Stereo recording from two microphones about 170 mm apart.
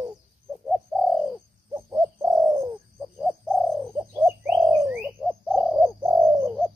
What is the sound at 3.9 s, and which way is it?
Bird, 10° right (ahead or behind).